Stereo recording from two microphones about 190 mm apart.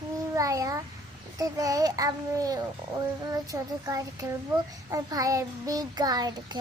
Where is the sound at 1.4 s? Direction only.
20° right (ahead or behind).